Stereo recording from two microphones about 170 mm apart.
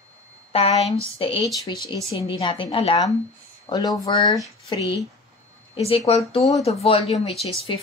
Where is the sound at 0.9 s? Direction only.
30° left (ahead or behind).